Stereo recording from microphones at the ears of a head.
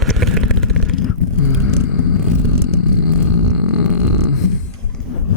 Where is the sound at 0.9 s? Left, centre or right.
Left.